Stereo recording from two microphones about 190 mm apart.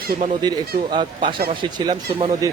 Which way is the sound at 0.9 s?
25° right (ahead or behind).